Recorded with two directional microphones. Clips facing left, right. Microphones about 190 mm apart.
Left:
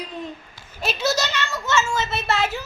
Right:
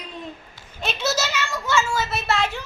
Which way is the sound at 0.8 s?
Centre (ahead or behind).